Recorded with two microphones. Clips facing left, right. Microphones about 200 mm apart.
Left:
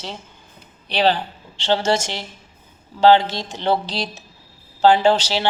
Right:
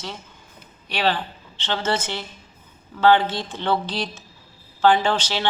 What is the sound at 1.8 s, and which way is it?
Speech, 85° left.